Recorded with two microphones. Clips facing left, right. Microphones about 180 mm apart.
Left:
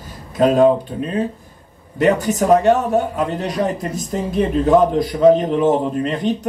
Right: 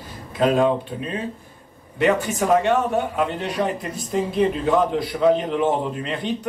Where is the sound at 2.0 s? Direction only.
40° left (ahead or behind).